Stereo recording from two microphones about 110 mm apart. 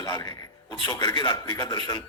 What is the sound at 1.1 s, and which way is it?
Speech, 50° left (ahead or behind).